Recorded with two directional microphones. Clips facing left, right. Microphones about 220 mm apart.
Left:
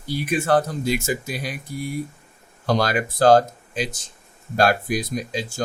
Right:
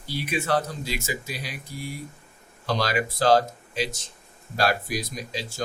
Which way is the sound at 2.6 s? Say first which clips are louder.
Left 4 dB; 50° left (ahead or behind).